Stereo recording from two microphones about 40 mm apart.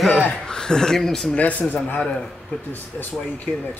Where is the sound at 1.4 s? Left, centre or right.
Left.